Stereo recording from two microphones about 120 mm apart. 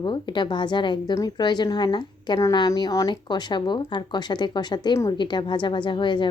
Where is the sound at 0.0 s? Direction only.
40° left (ahead or behind).